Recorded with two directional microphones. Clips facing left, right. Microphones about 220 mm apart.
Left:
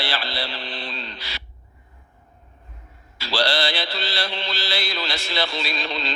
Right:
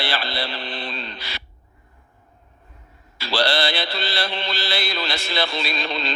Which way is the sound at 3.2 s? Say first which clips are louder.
Right 1 dB; 55° right (ahead or behind).